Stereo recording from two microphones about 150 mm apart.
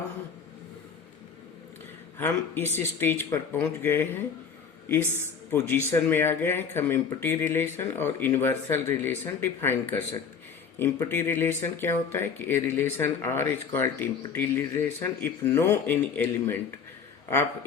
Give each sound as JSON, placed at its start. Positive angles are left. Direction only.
{"t": 2.1, "sound": "speech", "side_deg": 15}
{"t": 5.5, "sound": "speech", "side_deg": 15}